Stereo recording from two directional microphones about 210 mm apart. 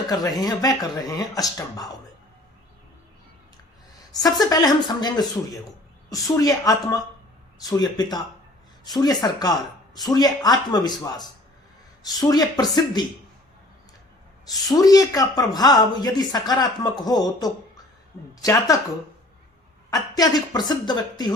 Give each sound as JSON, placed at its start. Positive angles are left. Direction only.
{"t": 0.1, "sound": "a woman's voice", "side_deg": 15}
{"t": 4.1, "sound": "a woman's voice", "side_deg": 15}
{"t": 14.4, "sound": "a woman's voice", "side_deg": 20}
{"t": 19.9, "sound": "speech", "side_deg": 20}